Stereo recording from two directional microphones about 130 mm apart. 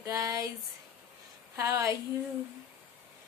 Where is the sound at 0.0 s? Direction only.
25° right (ahead or behind).